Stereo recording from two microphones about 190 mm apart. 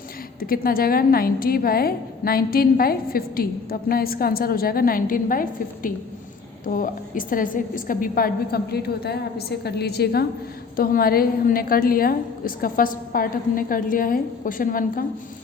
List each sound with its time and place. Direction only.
0.3 s a woman's voice: 50° left (ahead or behind)